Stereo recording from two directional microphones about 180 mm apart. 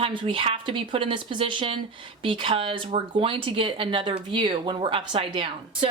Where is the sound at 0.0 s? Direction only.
25° right (ahead or behind).